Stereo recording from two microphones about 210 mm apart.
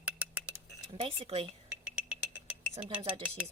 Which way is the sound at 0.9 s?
25° right (ahead or behind).